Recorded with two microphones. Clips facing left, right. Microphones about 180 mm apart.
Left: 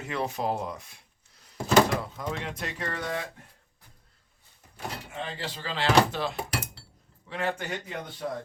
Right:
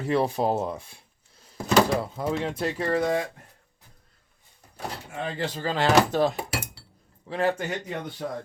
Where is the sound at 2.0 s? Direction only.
30° right (ahead or behind).